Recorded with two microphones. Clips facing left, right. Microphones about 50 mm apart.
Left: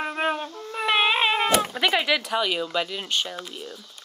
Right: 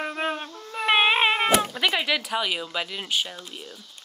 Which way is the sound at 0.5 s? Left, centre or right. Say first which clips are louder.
Left 1 dB; centre.